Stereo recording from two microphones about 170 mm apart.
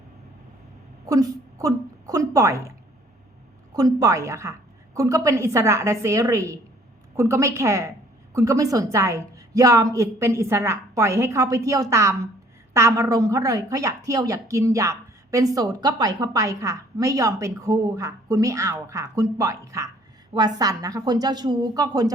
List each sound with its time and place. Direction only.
1.0 s a woman's voice: 20° right (ahead or behind)